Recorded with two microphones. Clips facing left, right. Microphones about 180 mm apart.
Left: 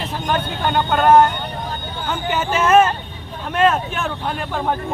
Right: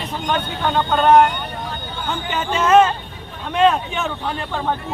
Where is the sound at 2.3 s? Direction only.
5° left (ahead or behind).